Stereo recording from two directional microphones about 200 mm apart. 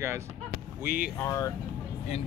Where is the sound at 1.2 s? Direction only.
15° left (ahead or behind).